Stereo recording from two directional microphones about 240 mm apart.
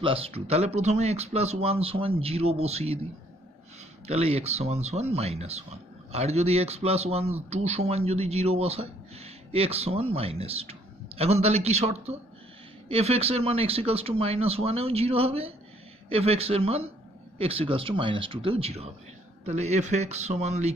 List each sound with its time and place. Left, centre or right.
0.0 s speech: right
4.1 s speech: right